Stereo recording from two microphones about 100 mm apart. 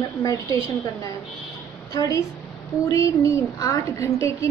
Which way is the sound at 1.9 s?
35° left (ahead or behind).